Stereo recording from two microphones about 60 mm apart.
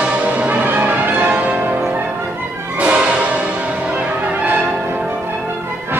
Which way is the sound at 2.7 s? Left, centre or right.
Right.